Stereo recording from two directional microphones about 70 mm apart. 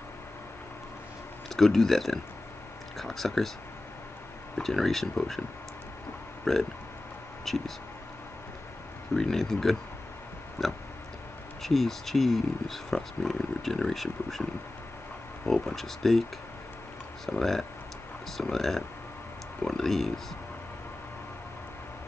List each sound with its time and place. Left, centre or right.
1.6 s speech: centre
4.6 s speech: centre
6.5 s speech: centre
9.1 s speech: centre
17.3 s speech: centre